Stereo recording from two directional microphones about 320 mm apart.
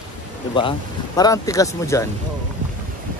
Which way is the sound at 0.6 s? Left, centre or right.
Centre.